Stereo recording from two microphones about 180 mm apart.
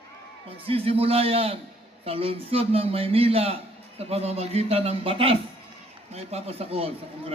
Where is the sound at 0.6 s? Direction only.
30° right (ahead or behind).